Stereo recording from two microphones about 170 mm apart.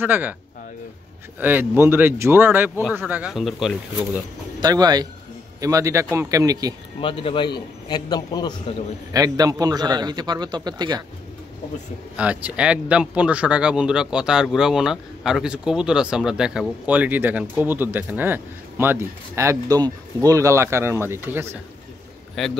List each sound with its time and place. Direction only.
0.0 s speech: 10° right (ahead or behind)
1.4 s speech: 10° right (ahead or behind)
4.6 s a man's voice: 25° right (ahead or behind)
7.0 s a man's voice: 30° left (ahead or behind)
9.1 s a man's voice: 20° right (ahead or behind)
12.2 s speech: 5° right (ahead or behind)
22.4 s a man's voice: centre (ahead or behind)